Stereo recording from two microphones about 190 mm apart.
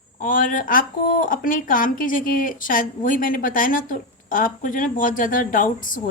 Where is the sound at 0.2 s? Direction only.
45° left (ahead or behind).